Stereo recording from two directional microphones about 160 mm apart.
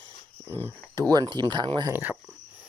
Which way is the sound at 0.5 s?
25° right (ahead or behind).